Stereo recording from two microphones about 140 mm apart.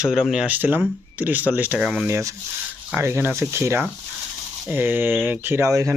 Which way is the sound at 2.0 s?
20° right (ahead or behind).